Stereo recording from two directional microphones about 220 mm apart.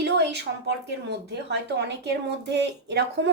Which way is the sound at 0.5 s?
45° right (ahead or behind).